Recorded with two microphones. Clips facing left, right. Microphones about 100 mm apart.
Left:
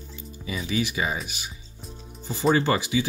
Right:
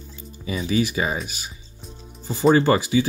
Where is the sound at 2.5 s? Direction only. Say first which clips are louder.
Right 5 dB; 35° right (ahead or behind).